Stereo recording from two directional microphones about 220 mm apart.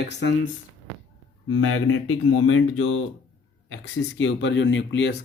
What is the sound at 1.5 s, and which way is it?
Speech, 65° left (ahead or behind).